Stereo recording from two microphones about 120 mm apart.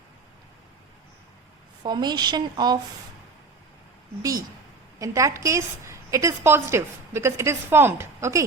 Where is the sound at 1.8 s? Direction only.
35° right (ahead or behind).